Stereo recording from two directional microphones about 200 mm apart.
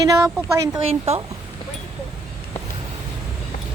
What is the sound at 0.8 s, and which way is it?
Speech, 30° right (ahead or behind).